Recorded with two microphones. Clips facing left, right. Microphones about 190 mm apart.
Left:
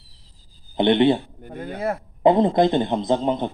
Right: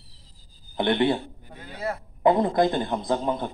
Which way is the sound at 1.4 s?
50° left (ahead or behind).